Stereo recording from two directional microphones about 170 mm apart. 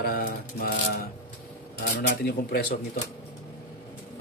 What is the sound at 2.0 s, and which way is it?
Speech, 75° left (ahead or behind).